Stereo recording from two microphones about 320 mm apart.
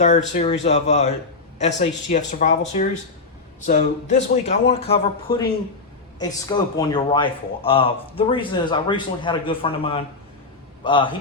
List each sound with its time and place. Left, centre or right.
0.3 s a man's voice: left